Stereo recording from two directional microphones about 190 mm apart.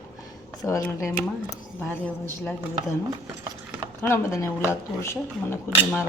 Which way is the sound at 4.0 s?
15° left (ahead or behind).